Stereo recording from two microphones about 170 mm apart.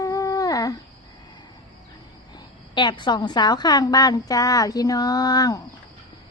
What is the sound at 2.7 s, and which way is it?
Speech, 25° left (ahead or behind).